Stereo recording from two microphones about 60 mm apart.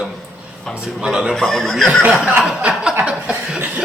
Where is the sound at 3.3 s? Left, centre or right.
Right.